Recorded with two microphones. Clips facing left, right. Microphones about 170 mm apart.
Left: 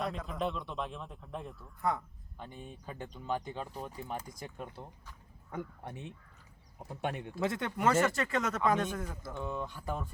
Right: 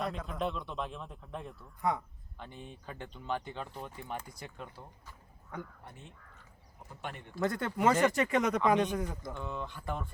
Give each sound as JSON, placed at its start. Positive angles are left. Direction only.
{"t": 0.0, "sound": "speech", "side_deg": 0}
{"t": 2.5, "sound": "speech", "side_deg": 45}
{"t": 2.8, "sound": "speech", "side_deg": 10}
{"t": 6.8, "sound": "speech", "side_deg": 70}
{"t": 7.3, "sound": "speech", "side_deg": 0}
{"t": 9.2, "sound": "speech", "side_deg": 10}